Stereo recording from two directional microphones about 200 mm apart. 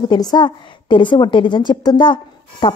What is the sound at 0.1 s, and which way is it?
A woman's voice, 20° left (ahead or behind).